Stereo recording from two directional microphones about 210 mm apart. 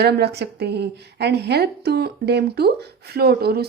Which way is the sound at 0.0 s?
50° right (ahead or behind).